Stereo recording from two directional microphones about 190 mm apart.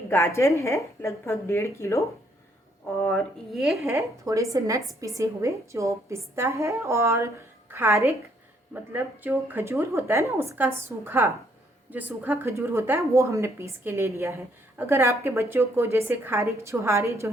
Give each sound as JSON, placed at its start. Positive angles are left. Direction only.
{"t": 0.1, "sound": "a woman's voice", "side_deg": 15}
{"t": 3.8, "sound": "a woman's voice", "side_deg": -15}